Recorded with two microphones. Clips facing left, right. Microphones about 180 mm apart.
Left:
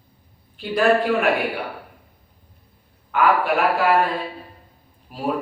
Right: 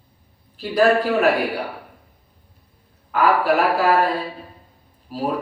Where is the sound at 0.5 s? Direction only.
40° right (ahead or behind).